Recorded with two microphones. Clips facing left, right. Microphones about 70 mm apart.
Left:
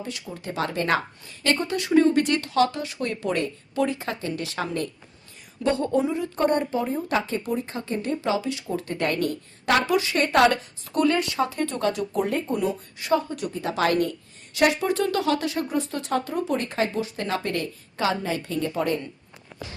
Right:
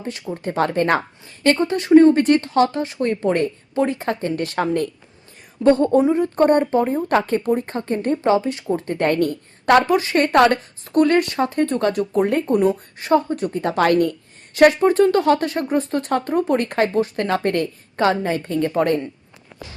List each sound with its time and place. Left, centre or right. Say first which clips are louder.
0.0 s a woman's voice: right 7 dB; right
13.5 s a woman's voice: right 6 dB; right